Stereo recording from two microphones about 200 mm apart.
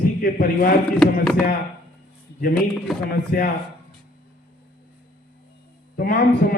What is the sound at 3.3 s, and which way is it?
Speech, 50° left (ahead or behind).